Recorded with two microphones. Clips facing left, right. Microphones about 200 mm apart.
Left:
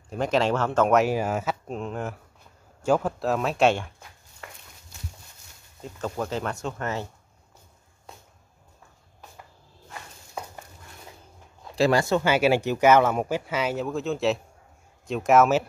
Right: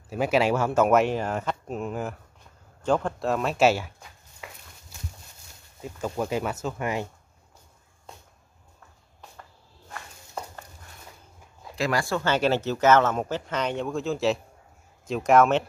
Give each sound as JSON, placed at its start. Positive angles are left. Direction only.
{"t": 0.1, "sound": "speech", "side_deg": -10}
{"t": 1.0, "sound": "speech", "side_deg": 5}
{"t": 1.8, "sound": "speech", "side_deg": -5}
{"t": 2.8, "sound": "speech", "side_deg": 5}
{"t": 5.8, "sound": "speech", "side_deg": -10}
{"t": 11.7, "sound": "speech", "side_deg": 30}
{"t": 12.3, "sound": "speech", "side_deg": 10}